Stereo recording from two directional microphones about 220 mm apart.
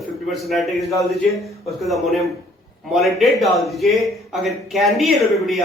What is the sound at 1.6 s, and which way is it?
A man's voice, centre (ahead or behind).